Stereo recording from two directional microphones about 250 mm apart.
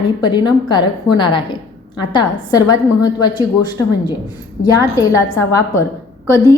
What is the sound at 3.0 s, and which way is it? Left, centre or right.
A woman's voice, centre.